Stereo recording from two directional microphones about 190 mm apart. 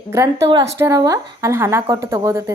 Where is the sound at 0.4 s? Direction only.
25° right (ahead or behind).